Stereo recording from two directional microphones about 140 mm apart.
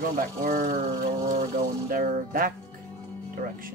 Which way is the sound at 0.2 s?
90° right.